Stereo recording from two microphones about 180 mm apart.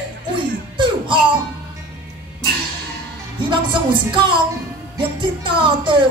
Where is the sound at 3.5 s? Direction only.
25° right (ahead or behind).